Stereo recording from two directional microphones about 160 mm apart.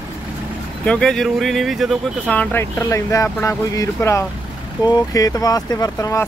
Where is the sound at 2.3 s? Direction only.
10° left (ahead or behind).